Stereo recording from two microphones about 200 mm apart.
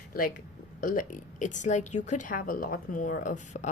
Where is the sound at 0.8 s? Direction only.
40° left (ahead or behind).